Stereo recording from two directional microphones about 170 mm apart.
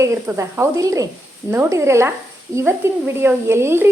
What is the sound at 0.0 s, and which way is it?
Speech, 15° right (ahead or behind).